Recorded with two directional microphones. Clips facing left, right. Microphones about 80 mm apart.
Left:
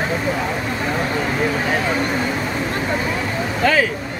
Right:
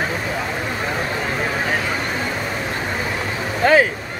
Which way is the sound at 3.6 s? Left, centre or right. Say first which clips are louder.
Right 3 dB; right.